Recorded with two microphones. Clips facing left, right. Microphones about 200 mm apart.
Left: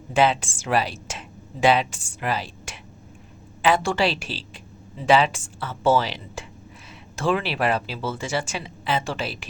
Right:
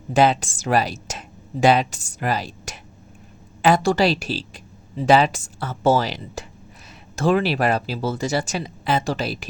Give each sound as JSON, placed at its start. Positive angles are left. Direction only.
{"t": 0.1, "sound": "speech", "side_deg": -40}